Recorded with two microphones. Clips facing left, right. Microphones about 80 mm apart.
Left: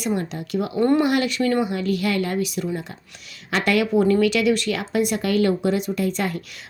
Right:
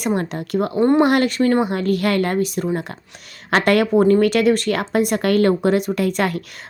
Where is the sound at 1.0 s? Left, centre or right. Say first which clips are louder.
Right 4 dB; right.